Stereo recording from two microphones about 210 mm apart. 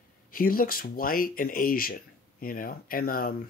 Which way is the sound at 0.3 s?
45° left (ahead or behind).